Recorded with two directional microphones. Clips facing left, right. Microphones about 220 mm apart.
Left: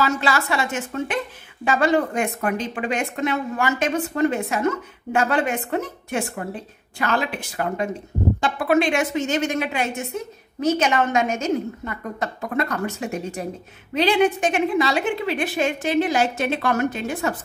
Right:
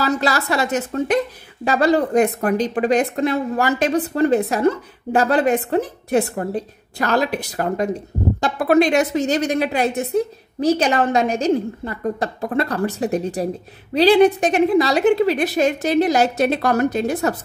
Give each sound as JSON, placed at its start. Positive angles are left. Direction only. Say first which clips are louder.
{"t": 0.0, "sound": "a woman's voice", "louder": "right 2 dB", "side_deg": -40}